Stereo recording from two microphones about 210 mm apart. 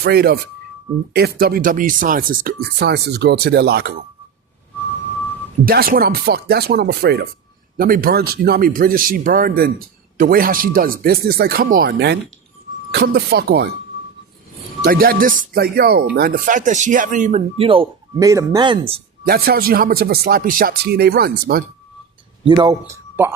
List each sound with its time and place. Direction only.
0.0 s speech: 50° right (ahead or behind)
5.6 s speech: 45° right (ahead or behind)
14.8 s speech: 45° right (ahead or behind); by 19.0 s 25° right (ahead or behind)
19.2 s speech: 45° right (ahead or behind)
22.4 s speech: 20° right (ahead or behind)